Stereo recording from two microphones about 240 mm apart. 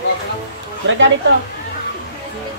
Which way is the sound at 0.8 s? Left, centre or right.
Right.